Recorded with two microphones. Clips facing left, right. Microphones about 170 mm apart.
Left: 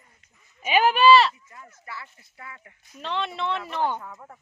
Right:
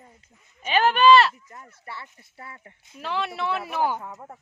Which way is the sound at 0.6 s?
10° left (ahead or behind).